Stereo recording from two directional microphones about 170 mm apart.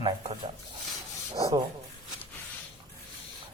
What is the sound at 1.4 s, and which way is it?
Speech, 20° right (ahead or behind).